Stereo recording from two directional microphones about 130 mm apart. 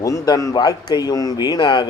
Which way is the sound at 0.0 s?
25° left (ahead or behind).